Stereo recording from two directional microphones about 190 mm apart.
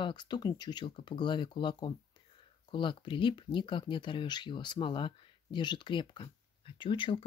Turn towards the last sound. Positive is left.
turn(degrees=25)  # may be behind; listen again after turning